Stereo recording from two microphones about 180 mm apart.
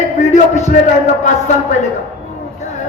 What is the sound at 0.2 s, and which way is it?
Music, 40° left (ahead or behind).